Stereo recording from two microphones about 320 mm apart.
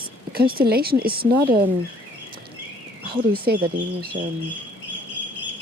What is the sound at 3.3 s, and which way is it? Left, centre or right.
Speech, right.